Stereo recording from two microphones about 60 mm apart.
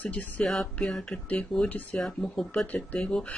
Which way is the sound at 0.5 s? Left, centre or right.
Centre.